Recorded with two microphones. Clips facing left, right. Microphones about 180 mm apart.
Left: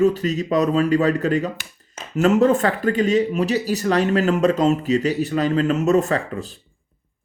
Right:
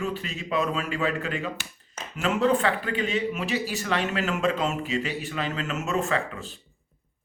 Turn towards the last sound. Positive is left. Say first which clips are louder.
# left 5 dB
turn(degrees=40)  # may be behind; listen again after turning